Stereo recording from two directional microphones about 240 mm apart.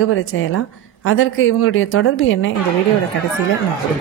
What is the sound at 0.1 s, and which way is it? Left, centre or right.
A woman's voice, left.